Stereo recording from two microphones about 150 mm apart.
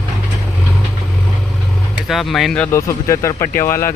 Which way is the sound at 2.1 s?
Centre (ahead or behind).